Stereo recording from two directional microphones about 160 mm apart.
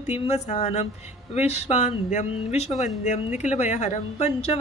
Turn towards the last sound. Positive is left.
turn(degrees=45)  # may be behind; listen again after turning